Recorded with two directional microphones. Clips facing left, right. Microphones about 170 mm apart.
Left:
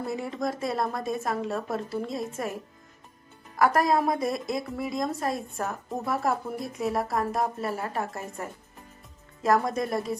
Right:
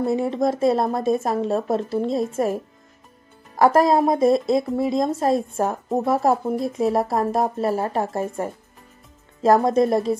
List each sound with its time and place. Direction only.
0.0 s a woman's voice: 25° right (ahead or behind)
9.7 s a woman's voice: 25° right (ahead or behind)